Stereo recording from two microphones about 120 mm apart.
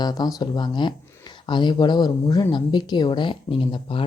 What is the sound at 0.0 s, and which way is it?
Speech, 35° left (ahead or behind).